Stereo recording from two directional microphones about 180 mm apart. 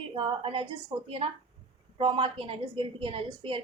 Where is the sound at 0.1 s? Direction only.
30° right (ahead or behind).